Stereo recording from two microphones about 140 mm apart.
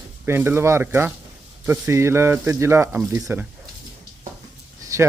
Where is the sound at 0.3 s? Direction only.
15° right (ahead or behind).